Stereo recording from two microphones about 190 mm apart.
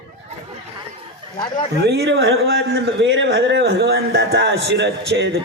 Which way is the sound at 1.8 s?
60° right (ahead or behind).